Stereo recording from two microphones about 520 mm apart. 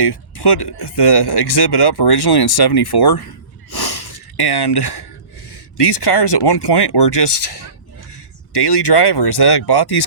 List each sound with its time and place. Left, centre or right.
0.0 s speech: left
3.7 s gasp: left
5.7 s speech: left